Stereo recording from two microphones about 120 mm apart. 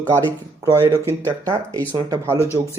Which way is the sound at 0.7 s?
20° right (ahead or behind).